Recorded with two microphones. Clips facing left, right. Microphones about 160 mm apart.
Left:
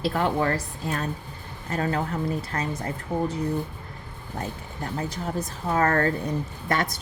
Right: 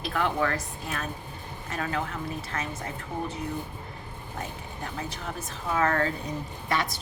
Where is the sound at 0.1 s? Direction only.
35° left (ahead or behind).